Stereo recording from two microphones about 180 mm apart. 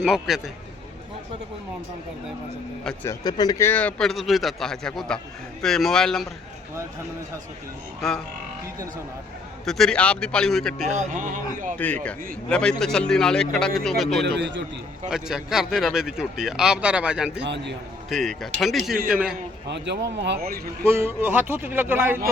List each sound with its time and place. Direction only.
0.0 s speech: 5° right (ahead or behind)
3.1 s speech: 20° left (ahead or behind); by 6.2 s 5° left (ahead or behind)
9.6 s speech: centre (ahead or behind)
11.1 s a man's voice: 45° right (ahead or behind)
11.8 s a man's voice: 10° left (ahead or behind)
14.3 s a man's voice: 80° right
15.1 s speech: centre (ahead or behind)
17.4 s speech: 75° right (ahead or behind)
18.1 s speech: centre (ahead or behind)
18.9 s a man's voice: 50° right (ahead or behind)
19.6 s speech: 75° right (ahead or behind)
20.9 s speech: 10° right (ahead or behind)